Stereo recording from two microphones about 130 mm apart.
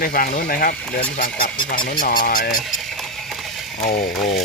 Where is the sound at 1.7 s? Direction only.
90° left.